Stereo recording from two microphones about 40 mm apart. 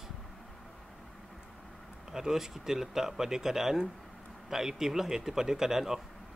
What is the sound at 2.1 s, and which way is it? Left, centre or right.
Speech, centre.